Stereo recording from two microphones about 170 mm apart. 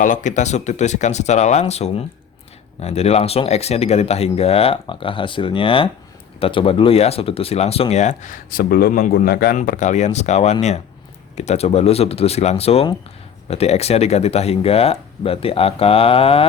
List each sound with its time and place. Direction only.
0.0 s speech: 45° left (ahead or behind); by 9.6 s 65° left (ahead or behind)
9.6 s speech: 45° left (ahead or behind)